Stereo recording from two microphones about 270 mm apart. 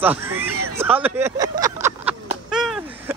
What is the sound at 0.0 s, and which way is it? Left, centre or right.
Speech, centre.